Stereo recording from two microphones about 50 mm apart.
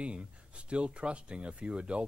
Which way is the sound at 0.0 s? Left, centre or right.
Right.